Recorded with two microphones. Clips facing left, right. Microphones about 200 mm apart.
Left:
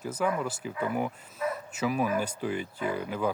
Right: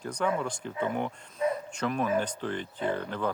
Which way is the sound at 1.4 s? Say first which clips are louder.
Right 3 dB; 25° right (ahead or behind).